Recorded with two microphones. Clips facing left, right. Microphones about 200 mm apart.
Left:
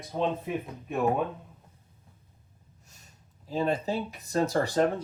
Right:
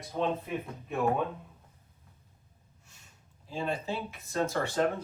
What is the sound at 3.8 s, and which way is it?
Speech, 40° left (ahead or behind).